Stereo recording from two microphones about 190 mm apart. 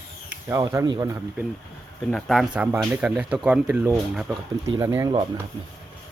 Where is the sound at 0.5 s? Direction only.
15° right (ahead or behind).